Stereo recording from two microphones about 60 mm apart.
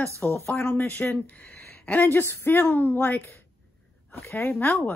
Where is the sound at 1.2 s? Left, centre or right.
Left.